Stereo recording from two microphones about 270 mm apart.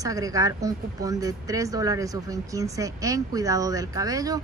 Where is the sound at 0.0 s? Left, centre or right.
Centre.